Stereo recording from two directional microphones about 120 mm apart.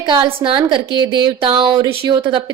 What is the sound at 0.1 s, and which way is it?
A woman's voice, 45° right (ahead or behind).